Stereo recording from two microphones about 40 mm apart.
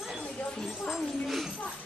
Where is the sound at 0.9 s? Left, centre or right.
Centre.